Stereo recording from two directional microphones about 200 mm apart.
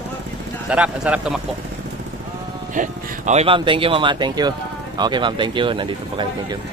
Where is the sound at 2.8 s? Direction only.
35° right (ahead or behind).